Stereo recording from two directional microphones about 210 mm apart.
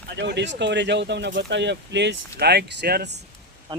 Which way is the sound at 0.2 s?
55° right (ahead or behind).